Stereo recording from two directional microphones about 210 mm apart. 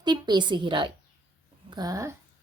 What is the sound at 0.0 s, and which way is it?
A woman's voice, 20° right (ahead or behind).